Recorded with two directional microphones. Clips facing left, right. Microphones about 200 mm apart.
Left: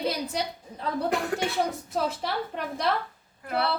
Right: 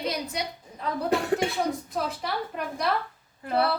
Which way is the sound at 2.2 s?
30° left (ahead or behind).